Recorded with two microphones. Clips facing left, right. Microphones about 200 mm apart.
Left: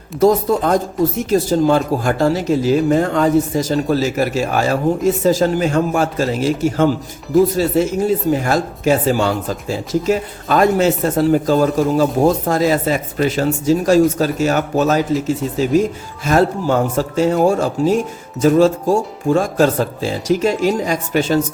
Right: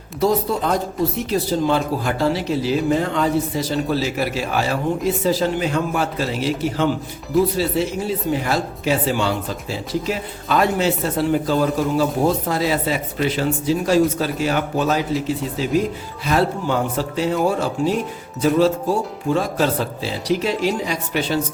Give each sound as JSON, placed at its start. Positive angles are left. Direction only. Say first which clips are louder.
{"t": 0.2, "sound": "speech", "louder": "left 5 dB", "side_deg": 45}